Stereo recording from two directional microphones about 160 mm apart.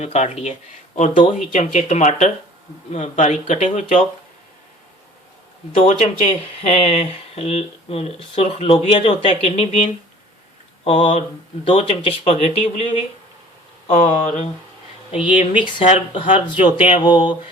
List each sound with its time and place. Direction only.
0.0 s speech: 40° left (ahead or behind)
1.5 s speech: 45° left (ahead or behind)
5.7 s speech: 45° left (ahead or behind)
13.9 s speech: 50° left (ahead or behind); by 17.3 s 30° left (ahead or behind)